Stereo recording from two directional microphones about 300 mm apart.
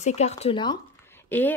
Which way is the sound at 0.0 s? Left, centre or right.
Left.